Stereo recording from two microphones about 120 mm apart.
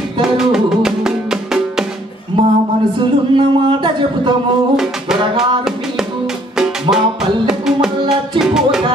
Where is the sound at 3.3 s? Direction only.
40° right (ahead or behind).